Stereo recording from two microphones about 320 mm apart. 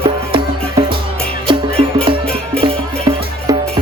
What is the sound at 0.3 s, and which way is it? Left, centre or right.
Music, centre.